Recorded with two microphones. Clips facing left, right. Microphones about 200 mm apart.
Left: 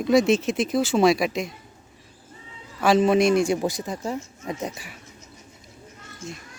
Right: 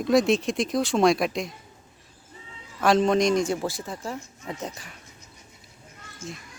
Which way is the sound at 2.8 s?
5° left (ahead or behind).